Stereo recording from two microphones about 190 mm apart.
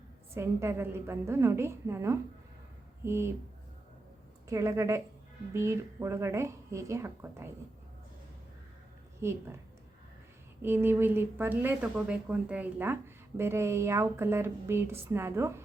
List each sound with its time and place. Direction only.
0.3 s a woman's voice: 15° right (ahead or behind)
4.4 s a woman's voice: 15° right (ahead or behind)
9.2 s a woman's voice: 15° right (ahead or behind)
10.6 s a woman's voice: 10° right (ahead or behind)